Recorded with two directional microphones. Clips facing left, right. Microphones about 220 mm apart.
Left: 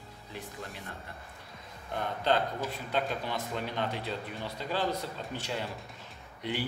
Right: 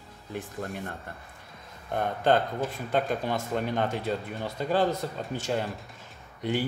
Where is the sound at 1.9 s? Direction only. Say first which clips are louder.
Right 5 dB; 50° right (ahead or behind).